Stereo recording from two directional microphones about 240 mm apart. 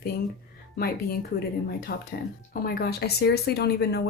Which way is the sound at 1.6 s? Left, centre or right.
Left.